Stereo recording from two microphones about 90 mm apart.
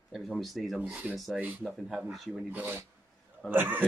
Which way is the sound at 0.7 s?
15° right (ahead or behind).